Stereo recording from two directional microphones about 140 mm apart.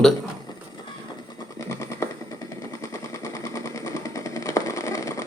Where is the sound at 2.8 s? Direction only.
25° left (ahead or behind).